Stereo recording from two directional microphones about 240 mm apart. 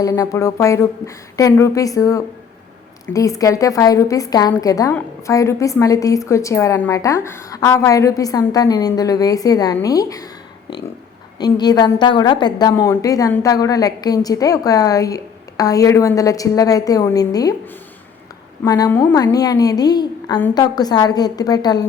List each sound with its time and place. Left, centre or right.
0.0 s a woman's voice: centre
11.3 s a woman's voice: centre
18.6 s a woman's voice: centre